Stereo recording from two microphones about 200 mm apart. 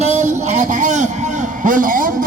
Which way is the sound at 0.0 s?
35° right (ahead or behind).